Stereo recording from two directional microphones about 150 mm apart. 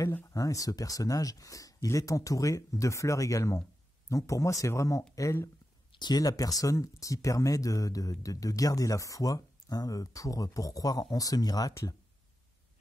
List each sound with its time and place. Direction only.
0.0 s speech: 20° left (ahead or behind)